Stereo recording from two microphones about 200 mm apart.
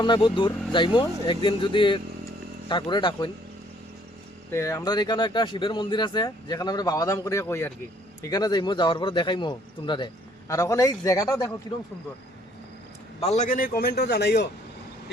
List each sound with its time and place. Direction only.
0.0 s speech: 25° left (ahead or behind)
4.5 s a man's voice: 15° left (ahead or behind)
13.1 s a man's voice: 30° left (ahead or behind); by 14.5 s 55° left (ahead or behind)